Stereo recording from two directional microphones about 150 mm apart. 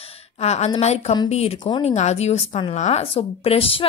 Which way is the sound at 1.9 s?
45° left (ahead or behind).